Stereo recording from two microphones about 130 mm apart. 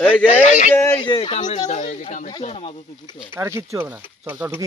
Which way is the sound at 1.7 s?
60° left (ahead or behind).